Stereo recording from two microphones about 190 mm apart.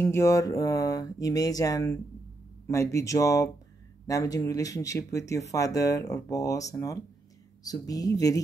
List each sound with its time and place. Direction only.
0.0 s speech: 15° left (ahead or behind)